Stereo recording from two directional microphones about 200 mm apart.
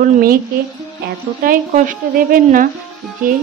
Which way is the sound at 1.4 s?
45° right (ahead or behind).